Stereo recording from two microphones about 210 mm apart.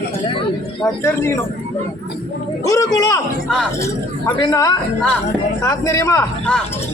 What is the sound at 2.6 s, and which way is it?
A man's voice, 15° left (ahead or behind).